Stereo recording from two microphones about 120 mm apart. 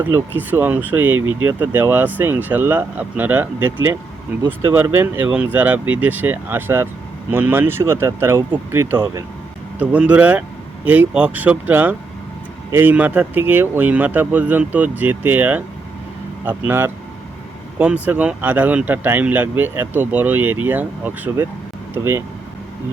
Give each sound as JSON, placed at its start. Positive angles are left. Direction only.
{"t": 0.0, "sound": "speech", "side_deg": -20}